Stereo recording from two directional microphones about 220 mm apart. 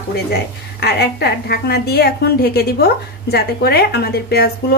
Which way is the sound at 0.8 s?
50° left (ahead or behind).